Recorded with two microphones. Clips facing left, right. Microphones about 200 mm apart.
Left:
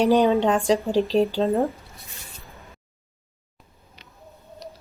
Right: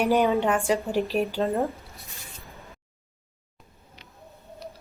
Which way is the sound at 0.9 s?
15° right (ahead or behind).